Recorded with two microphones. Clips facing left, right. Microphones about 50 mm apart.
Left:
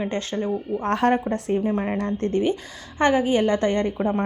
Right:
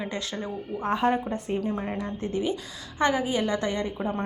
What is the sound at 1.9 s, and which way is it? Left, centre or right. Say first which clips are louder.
A woman's voice: left 6 dB; left.